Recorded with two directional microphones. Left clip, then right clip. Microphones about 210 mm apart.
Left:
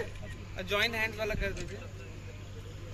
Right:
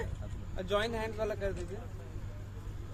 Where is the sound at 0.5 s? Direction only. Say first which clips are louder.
Left 3 dB; 35° right (ahead or behind).